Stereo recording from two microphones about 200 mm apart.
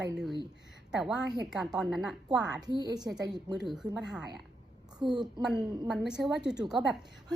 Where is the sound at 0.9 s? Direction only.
5° right (ahead or behind).